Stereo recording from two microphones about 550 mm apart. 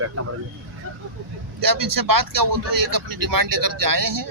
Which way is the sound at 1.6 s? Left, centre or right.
Right.